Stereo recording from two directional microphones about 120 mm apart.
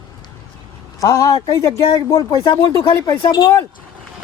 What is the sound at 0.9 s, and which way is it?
Speech, 25° left (ahead or behind).